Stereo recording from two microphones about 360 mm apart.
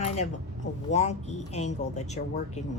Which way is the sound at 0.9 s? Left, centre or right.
Centre.